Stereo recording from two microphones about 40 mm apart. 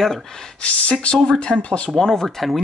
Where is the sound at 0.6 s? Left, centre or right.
Left.